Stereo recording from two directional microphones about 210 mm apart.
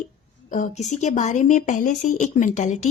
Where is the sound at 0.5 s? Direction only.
35° left (ahead or behind).